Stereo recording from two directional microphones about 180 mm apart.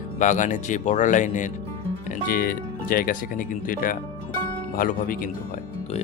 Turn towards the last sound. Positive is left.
turn(degrees=50)  # may be behind; listen again after turning